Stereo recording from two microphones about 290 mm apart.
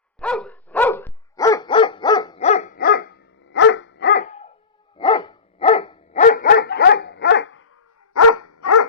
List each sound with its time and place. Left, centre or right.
0.2 s dog: centre
6.2 s dog: left
8.1 s dog: left